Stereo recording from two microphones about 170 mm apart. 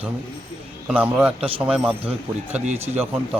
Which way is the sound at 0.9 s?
5° right (ahead or behind).